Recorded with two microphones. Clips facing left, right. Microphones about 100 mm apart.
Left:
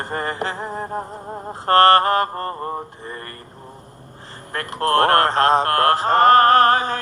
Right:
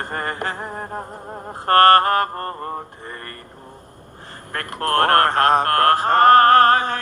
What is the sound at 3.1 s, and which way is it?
Speech, 40° right (ahead or behind).